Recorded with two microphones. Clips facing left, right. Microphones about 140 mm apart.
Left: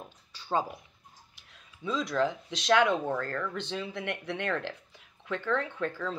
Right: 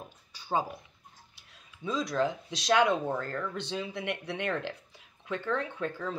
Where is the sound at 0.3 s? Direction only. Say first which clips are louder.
Left 1 dB; 15° right (ahead or behind).